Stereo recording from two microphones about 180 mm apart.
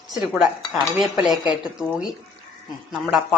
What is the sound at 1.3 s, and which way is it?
Speech, 25° left (ahead or behind).